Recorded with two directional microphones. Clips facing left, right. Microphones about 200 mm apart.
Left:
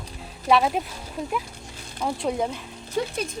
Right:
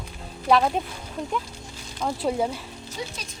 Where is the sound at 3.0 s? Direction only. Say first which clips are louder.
Left 8 dB; 55° left (ahead or behind).